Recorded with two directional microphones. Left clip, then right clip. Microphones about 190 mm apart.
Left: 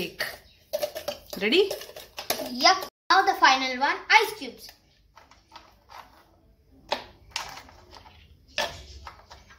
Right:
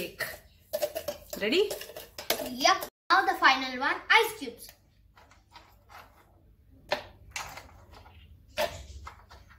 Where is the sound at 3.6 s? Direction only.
35° left (ahead or behind).